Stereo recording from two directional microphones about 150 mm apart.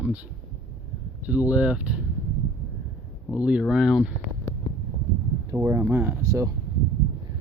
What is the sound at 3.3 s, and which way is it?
Speech, 5° right (ahead or behind).